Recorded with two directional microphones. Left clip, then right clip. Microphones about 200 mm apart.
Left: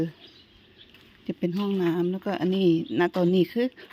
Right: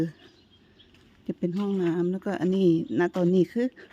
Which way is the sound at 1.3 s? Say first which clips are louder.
Left 1 dB; 15° right (ahead or behind).